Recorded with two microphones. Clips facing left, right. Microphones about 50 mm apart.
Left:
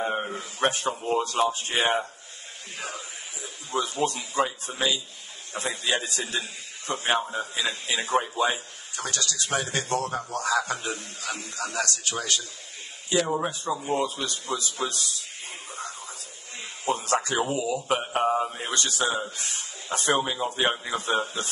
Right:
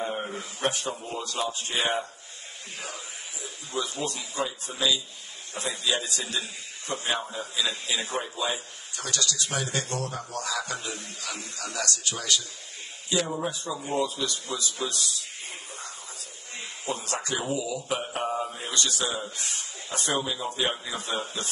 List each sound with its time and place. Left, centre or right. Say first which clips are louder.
0.3 s a man's voice: left 3 dB; left
3.7 s a man's voice: left 5 dB; left
16.8 s a man's voice: left 7 dB; left